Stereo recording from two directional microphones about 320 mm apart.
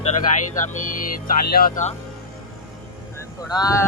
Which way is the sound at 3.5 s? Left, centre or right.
Centre.